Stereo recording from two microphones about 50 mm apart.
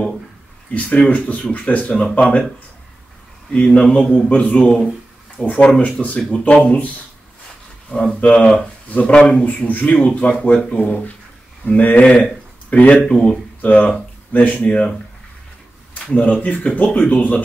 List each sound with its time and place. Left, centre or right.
0.7 s speech: left
2.0 s speech: centre
3.5 s speech: left
7.9 s speech: centre; by 13.0 s left
13.1 s speech: centre
13.6 s speech: left
14.3 s speech: left
15.9 s speech: left